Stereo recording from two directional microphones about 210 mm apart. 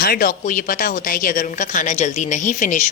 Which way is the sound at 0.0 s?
45° left (ahead or behind).